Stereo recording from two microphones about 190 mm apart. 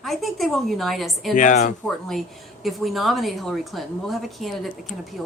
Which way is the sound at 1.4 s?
40° left (ahead or behind).